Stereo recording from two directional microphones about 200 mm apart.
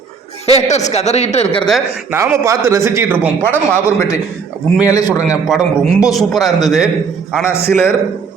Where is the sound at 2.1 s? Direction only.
15° right (ahead or behind).